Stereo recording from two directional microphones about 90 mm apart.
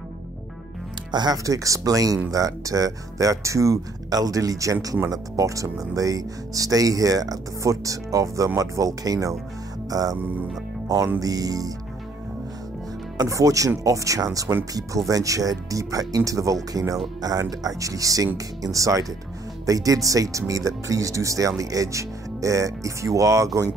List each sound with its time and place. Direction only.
1.1 s speech: 45° right (ahead or behind)
11.1 s speech: 40° right (ahead or behind)
13.2 s speech: 40° right (ahead or behind)